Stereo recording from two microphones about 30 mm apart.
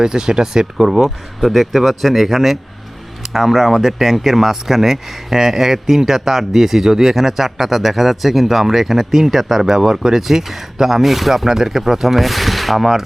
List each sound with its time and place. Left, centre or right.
0.0 s speech: right
1.0 s speech: centre